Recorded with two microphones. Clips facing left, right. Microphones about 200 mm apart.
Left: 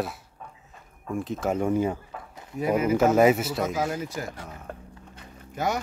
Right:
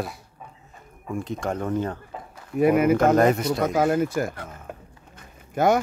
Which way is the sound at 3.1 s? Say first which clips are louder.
Right 1 dB; 5° left (ahead or behind).